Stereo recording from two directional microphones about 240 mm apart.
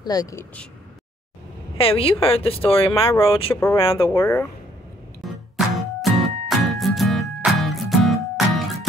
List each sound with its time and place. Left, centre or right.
0.0 s speech: centre
1.8 s speech: left
4.1 s speech: centre
5.2 s music: centre